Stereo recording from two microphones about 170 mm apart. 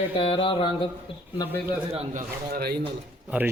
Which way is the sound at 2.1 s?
65° right (ahead or behind).